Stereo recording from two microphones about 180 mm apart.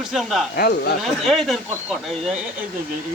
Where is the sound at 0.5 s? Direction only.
60° left (ahead or behind).